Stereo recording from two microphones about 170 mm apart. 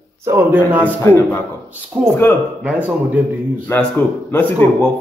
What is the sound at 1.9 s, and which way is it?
Speech, 5° right (ahead or behind).